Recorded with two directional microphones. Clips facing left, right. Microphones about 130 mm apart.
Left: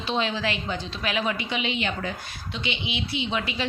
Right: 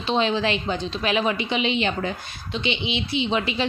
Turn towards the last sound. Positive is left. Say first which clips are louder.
# right 5 dB
turn(degrees=-25)  # may be behind; listen again after turning